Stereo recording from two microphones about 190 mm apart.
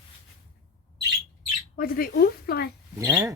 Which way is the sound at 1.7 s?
50° left (ahead or behind).